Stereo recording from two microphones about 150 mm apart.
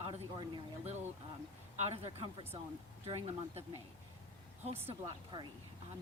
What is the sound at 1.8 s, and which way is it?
A woman's voice, 45° right (ahead or behind).